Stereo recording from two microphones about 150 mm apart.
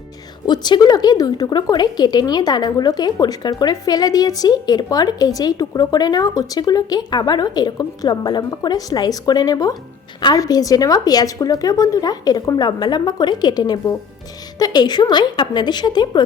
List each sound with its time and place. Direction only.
0.4 s a woman's voice: 30° left (ahead or behind)